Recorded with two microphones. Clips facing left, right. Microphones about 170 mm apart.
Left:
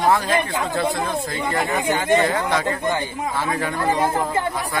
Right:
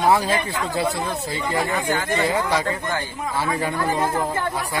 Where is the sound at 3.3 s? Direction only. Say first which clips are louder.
Right 2 dB; 10° right (ahead or behind).